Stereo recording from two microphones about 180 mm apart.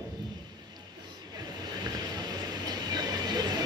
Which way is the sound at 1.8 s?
25° right (ahead or behind).